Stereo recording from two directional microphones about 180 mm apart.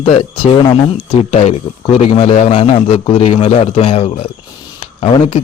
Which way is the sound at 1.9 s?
35° left (ahead or behind).